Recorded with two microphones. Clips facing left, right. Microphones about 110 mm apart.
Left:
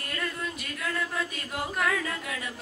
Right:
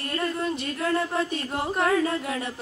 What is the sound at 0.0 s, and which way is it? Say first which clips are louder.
Speech: right 6 dB; 35° right (ahead or behind).